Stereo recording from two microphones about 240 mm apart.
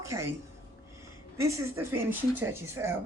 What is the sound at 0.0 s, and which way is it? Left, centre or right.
Speech, centre.